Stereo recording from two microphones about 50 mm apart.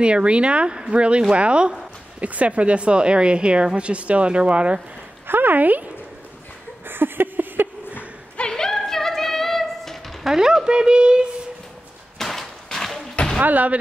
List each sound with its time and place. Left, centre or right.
0.0 s a woman's voice: right
5.2 s speech: right
6.9 s a sound: right
8.4 s music: centre
10.3 s a woman's voice: centre
12.2 s a sound: centre
13.4 s speech: right